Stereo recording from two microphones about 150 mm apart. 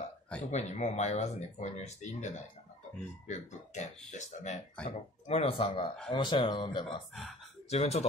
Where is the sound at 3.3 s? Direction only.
50° left (ahead or behind).